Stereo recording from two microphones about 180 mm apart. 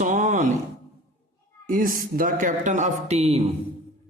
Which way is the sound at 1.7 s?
50° right (ahead or behind).